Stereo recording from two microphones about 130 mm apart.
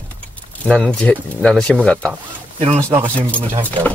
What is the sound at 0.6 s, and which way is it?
Speech, 5° left (ahead or behind).